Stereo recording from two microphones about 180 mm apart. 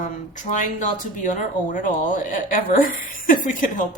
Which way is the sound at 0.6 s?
45° left (ahead or behind).